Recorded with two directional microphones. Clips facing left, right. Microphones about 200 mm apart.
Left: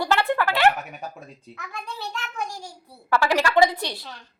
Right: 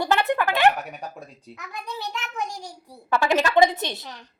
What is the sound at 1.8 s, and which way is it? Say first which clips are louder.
A child's voice: right 2 dB; 20° right (ahead or behind).